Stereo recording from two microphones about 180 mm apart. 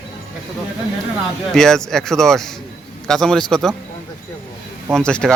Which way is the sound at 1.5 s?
5° left (ahead or behind).